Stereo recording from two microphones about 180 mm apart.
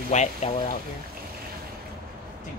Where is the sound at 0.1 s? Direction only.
40° left (ahead or behind).